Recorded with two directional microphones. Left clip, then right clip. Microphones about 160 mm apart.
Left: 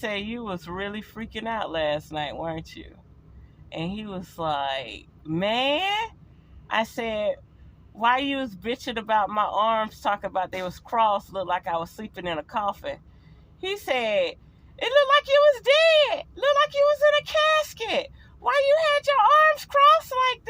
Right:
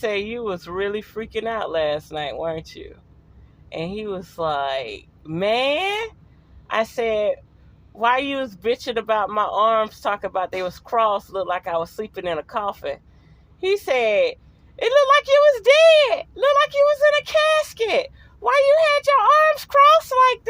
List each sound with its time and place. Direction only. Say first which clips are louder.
0.0 s speech: right 6 dB; 30° right (ahead or behind)